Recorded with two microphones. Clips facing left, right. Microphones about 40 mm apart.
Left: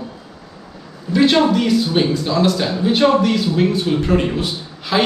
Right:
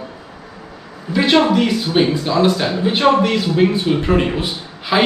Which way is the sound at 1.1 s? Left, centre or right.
Centre.